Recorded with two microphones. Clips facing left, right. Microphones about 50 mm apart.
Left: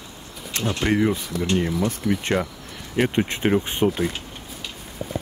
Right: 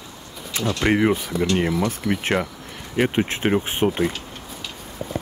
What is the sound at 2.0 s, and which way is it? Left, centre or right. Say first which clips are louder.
Speech: even; right.